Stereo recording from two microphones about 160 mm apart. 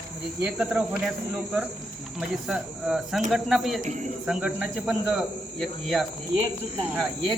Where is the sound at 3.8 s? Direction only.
50° right (ahead or behind).